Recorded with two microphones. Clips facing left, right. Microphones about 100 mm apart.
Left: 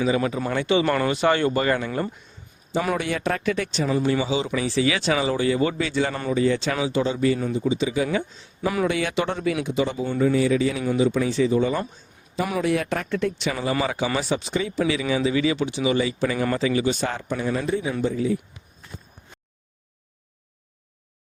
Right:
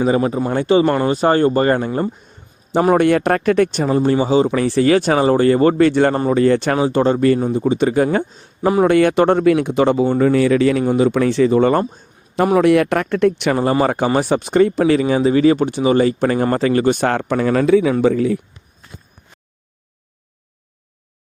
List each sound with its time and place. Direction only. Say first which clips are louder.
0.0 s speech: right 6 dB; 40° right (ahead or behind)
0.9 s speech: right 6 dB; 25° right (ahead or behind)
1.1 s speech: right 6 dB; 40° right (ahead or behind)
2.9 s speech: right 11 dB; 55° right (ahead or behind)
8.8 s speech: right 12 dB; 55° right (ahead or behind)
11.8 s speech: right 9 dB; 40° right (ahead or behind)
12.5 s speech: right 10 dB; 65° right (ahead or behind); by 17.9 s 85° right
18.0 s a man's voice: right 8 dB; 70° right (ahead or behind)